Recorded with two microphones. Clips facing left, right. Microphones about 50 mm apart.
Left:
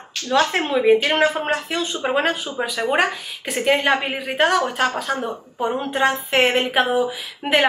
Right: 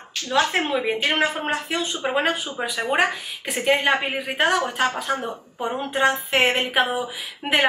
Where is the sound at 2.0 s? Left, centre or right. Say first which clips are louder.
Left 2 dB; centre.